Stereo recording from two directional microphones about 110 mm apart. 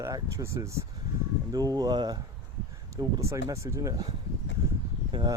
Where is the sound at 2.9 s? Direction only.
30° right (ahead or behind).